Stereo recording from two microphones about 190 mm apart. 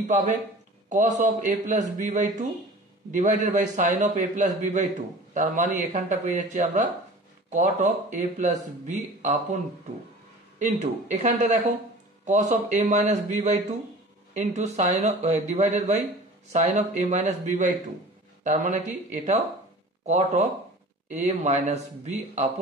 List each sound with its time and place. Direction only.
0.8 s speech: 40° right (ahead or behind)
10.6 s speech: 40° right (ahead or behind)